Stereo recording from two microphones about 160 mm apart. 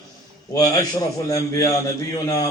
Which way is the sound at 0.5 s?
25° left (ahead or behind).